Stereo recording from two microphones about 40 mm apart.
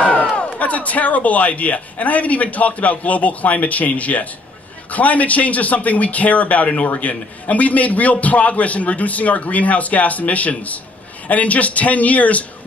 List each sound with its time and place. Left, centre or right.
0.0 s speech: left